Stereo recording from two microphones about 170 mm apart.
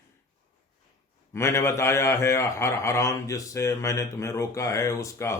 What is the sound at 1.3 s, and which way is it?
A man's voice, 15° left (ahead or behind).